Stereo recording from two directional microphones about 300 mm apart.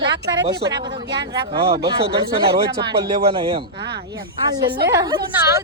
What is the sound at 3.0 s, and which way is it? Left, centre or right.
A woman's voice, centre.